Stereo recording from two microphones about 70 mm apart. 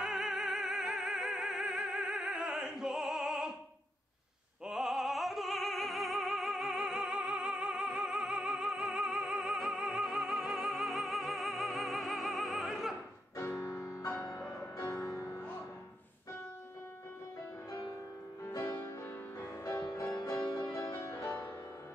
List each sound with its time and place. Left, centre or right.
0.0 s music: centre
4.6 s opera: centre
13.4 s music: left
19.4 s music: left
20.3 s music: left
20.7 s music: left